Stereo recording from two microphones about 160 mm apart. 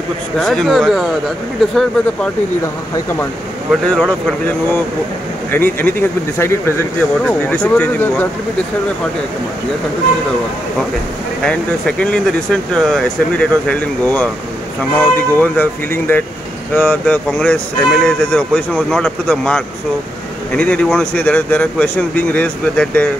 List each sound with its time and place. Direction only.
0.4 s speech: 5° left (ahead or behind)
3.8 s speech: 5° left (ahead or behind)
11.4 s speech: 5° left (ahead or behind)